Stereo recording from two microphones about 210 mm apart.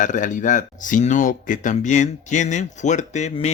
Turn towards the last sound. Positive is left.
turn(degrees=30)  # may be behind; listen again after turning